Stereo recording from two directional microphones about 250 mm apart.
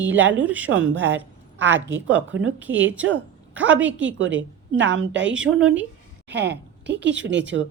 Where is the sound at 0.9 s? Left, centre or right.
Right.